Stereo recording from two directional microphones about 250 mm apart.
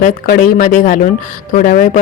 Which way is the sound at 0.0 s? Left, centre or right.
Left.